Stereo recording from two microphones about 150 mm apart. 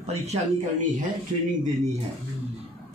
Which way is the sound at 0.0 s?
45° right (ahead or behind).